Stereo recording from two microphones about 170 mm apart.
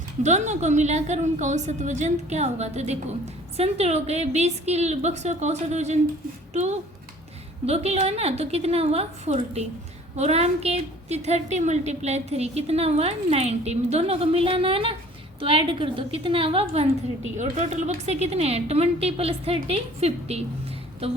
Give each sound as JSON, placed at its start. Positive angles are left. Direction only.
{"t": 0.2, "sound": "a woman's voice", "side_deg": -45}